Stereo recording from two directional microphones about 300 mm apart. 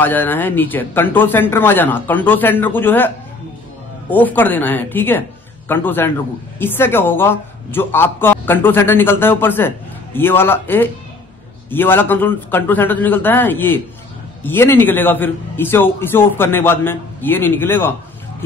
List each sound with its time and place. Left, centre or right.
0.0 s a woman's voice: centre
4.1 s a woman's voice: centre